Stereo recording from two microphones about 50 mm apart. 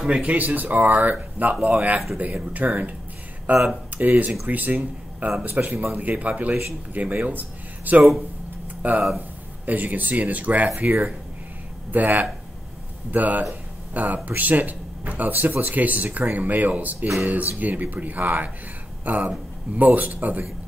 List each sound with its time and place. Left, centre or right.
0.0 s speech: right
6.0 s speech: right
7.2 s a sound: right
8.8 s speech: right